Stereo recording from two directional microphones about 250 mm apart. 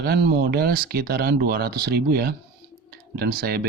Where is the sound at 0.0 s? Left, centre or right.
Right.